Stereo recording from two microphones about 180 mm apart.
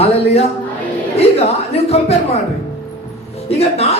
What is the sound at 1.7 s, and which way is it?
Speech, 35° left (ahead or behind).